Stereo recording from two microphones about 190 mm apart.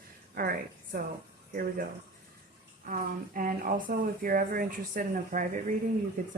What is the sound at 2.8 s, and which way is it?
Speech, 45° right (ahead or behind).